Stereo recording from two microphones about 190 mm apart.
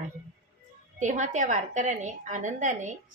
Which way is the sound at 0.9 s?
40° right (ahead or behind).